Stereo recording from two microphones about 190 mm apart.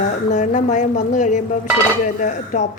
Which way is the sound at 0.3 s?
40° left (ahead or behind).